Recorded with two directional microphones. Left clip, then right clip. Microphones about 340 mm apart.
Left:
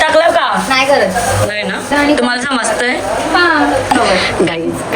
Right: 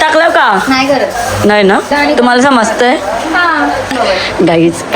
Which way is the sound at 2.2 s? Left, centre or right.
Centre.